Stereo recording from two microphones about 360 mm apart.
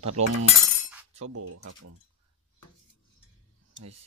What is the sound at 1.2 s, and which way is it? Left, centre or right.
Speech, right.